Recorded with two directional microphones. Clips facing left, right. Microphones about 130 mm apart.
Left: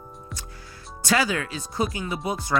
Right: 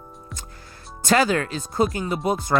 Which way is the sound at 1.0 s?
50° right (ahead or behind).